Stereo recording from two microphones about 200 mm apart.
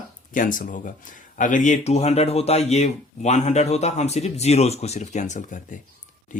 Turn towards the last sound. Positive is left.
turn(degrees=40)  # may be behind; listen again after turning